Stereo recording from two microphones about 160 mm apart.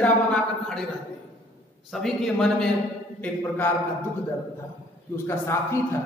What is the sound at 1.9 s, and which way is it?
A man's voice, centre (ahead or behind).